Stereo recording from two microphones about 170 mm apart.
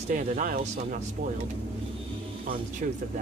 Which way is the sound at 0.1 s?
50° right (ahead or behind).